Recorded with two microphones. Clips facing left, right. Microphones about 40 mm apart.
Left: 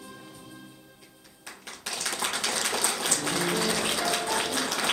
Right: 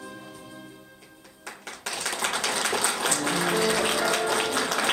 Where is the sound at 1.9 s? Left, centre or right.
Centre.